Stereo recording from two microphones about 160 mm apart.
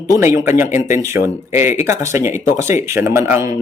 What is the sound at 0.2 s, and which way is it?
Speech, 15° right (ahead or behind).